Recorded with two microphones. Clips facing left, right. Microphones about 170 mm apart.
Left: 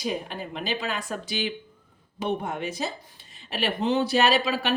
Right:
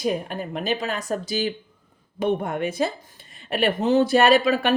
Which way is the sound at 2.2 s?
55° right (ahead or behind).